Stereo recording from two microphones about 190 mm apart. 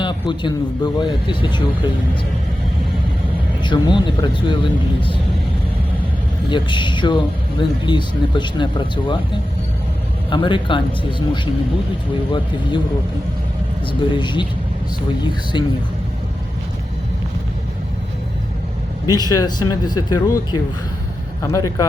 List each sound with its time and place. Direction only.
0.0 s speech: 25° left (ahead or behind)
3.6 s speech: 25° left (ahead or behind)
6.5 s speech: 25° left (ahead or behind)
10.2 s speech: 25° left (ahead or behind)
14.1 s speech: 25° left (ahead or behind)
19.1 s a man's voice: 20° left (ahead or behind)